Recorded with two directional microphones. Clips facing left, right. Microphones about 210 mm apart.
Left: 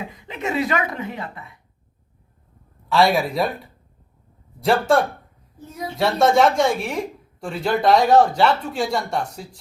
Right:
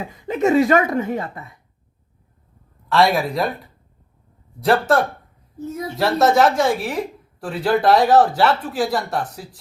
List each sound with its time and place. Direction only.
0.3 s speech: 45° right (ahead or behind)
2.9 s speech: centre (ahead or behind)
4.6 s speech: centre (ahead or behind)